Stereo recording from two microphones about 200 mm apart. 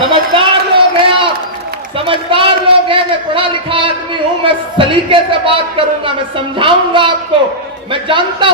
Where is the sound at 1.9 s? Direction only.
25° right (ahead or behind).